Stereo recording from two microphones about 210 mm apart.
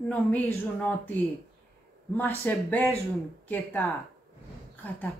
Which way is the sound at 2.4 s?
10° left (ahead or behind).